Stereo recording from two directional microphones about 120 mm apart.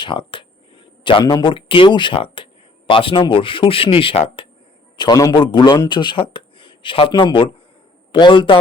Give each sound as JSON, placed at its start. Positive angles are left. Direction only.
{"t": 0.0, "sound": "speech", "side_deg": 45}
{"t": 4.9, "sound": "a man's voice", "side_deg": 35}